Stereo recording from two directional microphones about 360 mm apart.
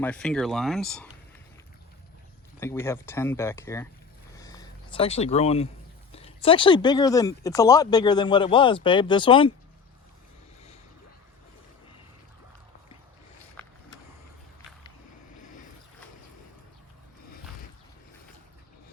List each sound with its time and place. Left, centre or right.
0.0 s speech: centre
2.6 s speech: centre
4.4 s a sound: centre
6.1 s speech: centre